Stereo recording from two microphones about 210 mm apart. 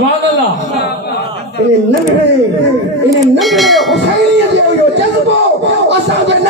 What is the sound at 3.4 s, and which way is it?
Speech, centre (ahead or behind).